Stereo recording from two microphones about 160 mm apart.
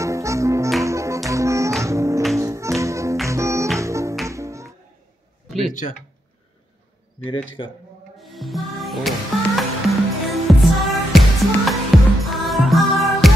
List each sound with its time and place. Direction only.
0.0 s music: 20° right (ahead or behind)
5.7 s speech: 50° left (ahead or behind)
8.2 s music: centre (ahead or behind)